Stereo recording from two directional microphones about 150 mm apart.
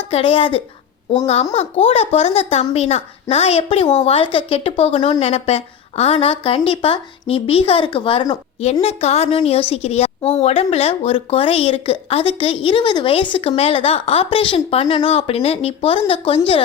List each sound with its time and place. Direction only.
0.1 s a woman's voice: 40° left (ahead or behind)
8.6 s a woman's voice: 45° left (ahead or behind)